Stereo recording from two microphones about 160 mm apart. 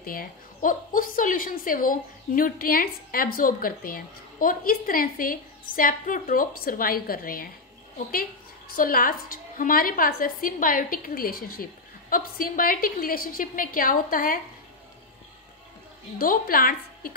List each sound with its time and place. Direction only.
0.0 s a woman's voice: 65° left (ahead or behind)
16.2 s a woman's voice: 65° left (ahead or behind)